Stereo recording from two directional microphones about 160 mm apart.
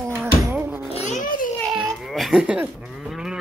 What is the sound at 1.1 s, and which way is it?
Speech, 55° left (ahead or behind).